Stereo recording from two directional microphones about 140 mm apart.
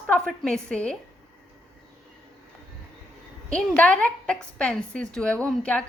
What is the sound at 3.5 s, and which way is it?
A woman's voice, 10° left (ahead or behind).